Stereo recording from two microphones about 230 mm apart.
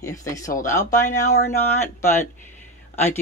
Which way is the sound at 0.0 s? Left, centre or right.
Centre.